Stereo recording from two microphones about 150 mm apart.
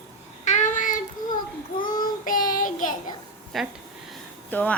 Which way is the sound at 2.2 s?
65° left (ahead or behind).